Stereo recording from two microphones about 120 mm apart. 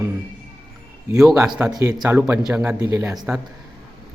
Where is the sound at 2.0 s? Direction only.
20° right (ahead or behind).